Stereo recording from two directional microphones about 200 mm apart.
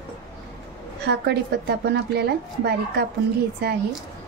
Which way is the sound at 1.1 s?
55° right (ahead or behind).